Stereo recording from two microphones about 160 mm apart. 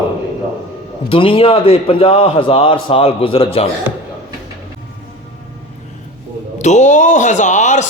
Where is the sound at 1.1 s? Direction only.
35° left (ahead or behind).